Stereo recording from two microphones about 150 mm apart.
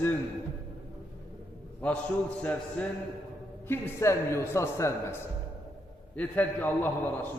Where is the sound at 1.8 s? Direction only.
10° left (ahead or behind).